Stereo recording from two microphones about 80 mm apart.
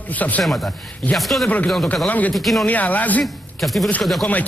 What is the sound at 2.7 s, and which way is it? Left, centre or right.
Speech, centre.